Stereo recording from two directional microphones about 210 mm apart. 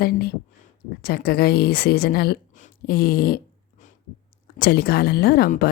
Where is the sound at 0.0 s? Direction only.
45° left (ahead or behind).